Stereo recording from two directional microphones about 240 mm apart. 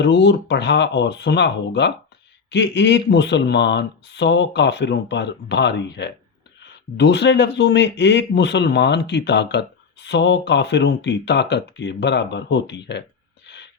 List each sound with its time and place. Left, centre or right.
0.0 s speech: left